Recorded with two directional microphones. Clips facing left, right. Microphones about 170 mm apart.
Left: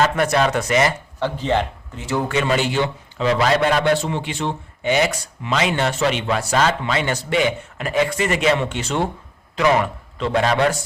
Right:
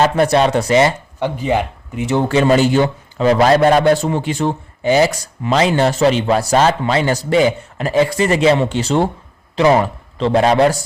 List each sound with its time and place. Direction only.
0.0 s speech: 30° right (ahead or behind)
1.2 s speech: 10° right (ahead or behind); by 10.8 s 35° right (ahead or behind)